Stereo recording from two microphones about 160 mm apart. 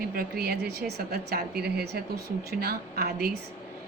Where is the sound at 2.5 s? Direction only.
70° right (ahead or behind).